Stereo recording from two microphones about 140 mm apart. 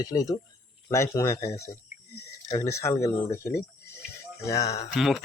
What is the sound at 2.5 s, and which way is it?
Speech, 20° left (ahead or behind).